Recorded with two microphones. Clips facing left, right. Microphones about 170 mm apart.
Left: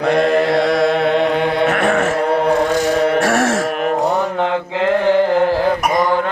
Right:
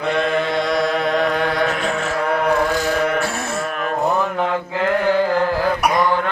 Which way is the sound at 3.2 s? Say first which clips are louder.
Left 7 dB; 90° left.